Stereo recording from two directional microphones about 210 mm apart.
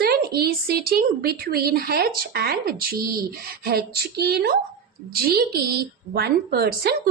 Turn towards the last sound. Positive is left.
turn(degrees=-45)  # may be behind; listen again after turning